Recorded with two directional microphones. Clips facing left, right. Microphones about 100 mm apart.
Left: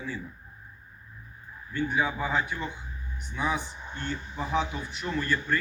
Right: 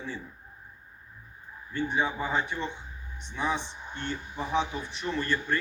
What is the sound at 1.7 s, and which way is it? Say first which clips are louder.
Speech: left 1 dB; 25° right (ahead or behind).